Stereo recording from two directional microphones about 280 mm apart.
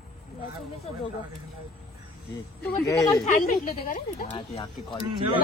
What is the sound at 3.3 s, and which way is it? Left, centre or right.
Speech, left.